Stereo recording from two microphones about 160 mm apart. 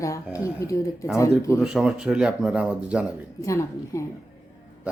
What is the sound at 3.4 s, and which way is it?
Speech, 20° left (ahead or behind).